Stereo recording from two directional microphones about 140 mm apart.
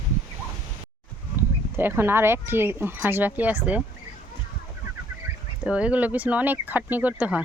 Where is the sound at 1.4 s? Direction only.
15° right (ahead or behind).